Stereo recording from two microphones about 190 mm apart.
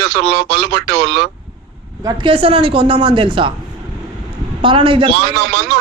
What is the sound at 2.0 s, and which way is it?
A woman's voice, 25° right (ahead or behind).